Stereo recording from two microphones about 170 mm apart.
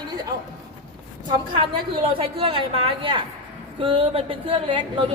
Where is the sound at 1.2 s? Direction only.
30° right (ahead or behind).